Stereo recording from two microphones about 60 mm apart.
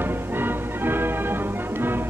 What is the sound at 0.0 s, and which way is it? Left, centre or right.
Music, right.